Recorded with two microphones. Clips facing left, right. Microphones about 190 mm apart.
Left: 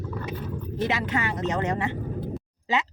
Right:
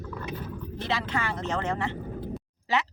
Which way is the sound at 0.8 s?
20° left (ahead or behind).